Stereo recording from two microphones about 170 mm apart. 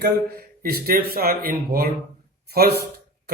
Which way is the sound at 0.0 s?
65° right (ahead or behind).